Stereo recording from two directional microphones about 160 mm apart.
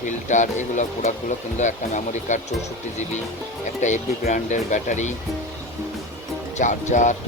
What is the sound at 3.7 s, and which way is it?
Speech, 50° left (ahead or behind).